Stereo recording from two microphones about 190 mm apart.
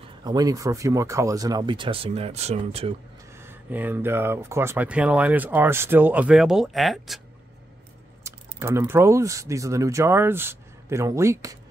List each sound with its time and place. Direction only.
0.2 s speech: 20° right (ahead or behind)
3.3 s speech: 10° right (ahead or behind)
8.2 s speech: 15° right (ahead or behind)